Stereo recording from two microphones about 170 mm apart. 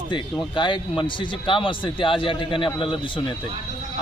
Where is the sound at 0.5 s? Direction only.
25° left (ahead or behind).